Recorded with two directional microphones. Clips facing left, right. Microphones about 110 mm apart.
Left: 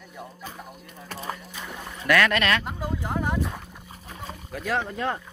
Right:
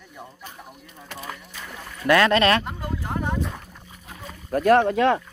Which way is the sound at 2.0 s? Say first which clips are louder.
Right 4 dB; 30° right (ahead or behind).